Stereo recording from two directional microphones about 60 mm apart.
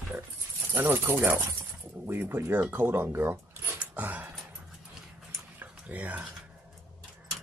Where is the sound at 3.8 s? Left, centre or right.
Right.